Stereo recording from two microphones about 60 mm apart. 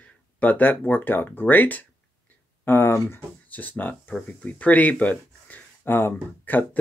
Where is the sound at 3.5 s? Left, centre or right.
Left.